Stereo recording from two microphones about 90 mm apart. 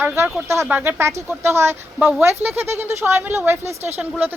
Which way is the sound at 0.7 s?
20° right (ahead or behind).